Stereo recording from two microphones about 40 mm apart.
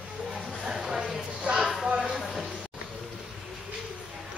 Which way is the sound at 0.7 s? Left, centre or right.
Centre.